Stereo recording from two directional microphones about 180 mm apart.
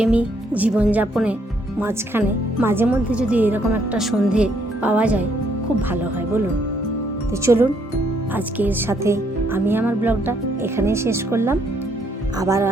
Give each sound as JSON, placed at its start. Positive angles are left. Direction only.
{"t": 0.0, "sound": "speech", "side_deg": -5}
{"t": 7.4, "sound": "speech", "side_deg": -15}